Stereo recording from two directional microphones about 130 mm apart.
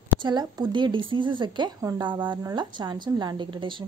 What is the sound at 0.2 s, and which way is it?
A woman's voice, 30° right (ahead or behind).